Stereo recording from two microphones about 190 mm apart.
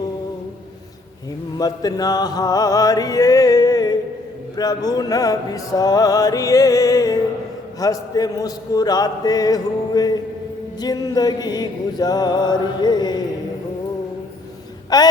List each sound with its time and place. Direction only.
1.5 s mantra: 20° left (ahead or behind)
4.5 s music: 20° left (ahead or behind)
14.9 s a sound: 20° left (ahead or behind)